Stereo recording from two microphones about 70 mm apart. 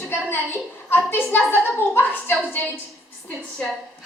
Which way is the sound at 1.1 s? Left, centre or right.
Left.